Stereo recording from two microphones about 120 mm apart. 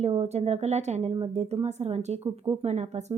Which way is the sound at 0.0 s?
60° right (ahead or behind).